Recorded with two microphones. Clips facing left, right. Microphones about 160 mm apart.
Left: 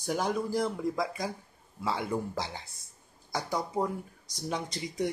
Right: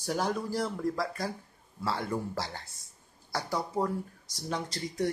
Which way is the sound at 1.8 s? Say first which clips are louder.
Left 1 dB; 10° left (ahead or behind).